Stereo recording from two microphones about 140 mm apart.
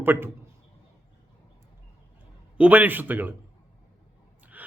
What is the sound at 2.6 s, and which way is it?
Speech, 10° right (ahead or behind).